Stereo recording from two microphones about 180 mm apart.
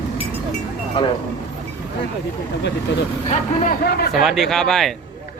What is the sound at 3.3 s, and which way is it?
Speech, 50° left (ahead or behind).